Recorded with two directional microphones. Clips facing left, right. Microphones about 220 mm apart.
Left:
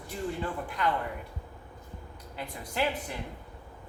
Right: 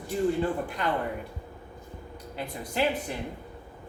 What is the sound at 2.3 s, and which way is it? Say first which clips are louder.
Speech: right 4 dB; 25° right (ahead or behind).